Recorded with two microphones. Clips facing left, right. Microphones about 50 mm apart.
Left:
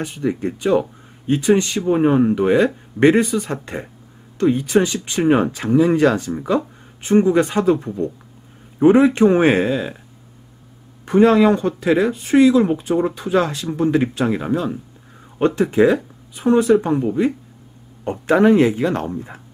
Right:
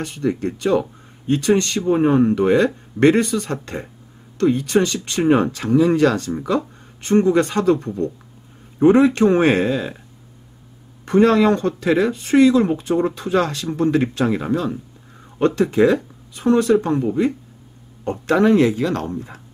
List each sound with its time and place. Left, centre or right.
0.0 s speech: centre
5.6 s speech: left; by 9.9 s centre
11.1 s speech: centre
18.2 s speech: left